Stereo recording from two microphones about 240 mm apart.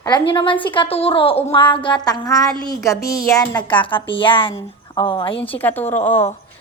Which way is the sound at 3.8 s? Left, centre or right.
Left.